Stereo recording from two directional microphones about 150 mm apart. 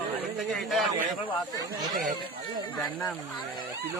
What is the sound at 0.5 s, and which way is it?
Speech, centre (ahead or behind).